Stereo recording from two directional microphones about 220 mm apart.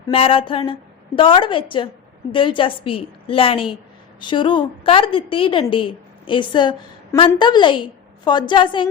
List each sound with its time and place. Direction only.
0.1 s a woman's voice: 25° left (ahead or behind)